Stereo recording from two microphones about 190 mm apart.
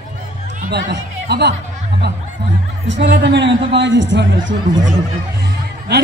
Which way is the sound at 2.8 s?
70° right (ahead or behind).